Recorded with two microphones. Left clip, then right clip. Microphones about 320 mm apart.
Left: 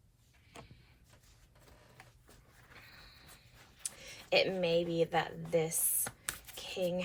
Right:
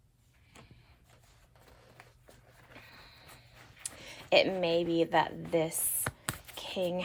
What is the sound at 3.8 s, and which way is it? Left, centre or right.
Speech, right.